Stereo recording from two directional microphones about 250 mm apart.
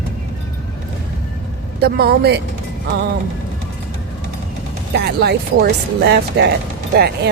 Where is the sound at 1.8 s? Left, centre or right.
Right.